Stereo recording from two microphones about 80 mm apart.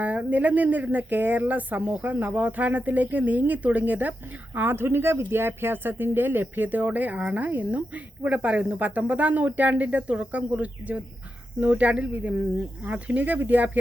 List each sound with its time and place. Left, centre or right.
0.0 s speech: centre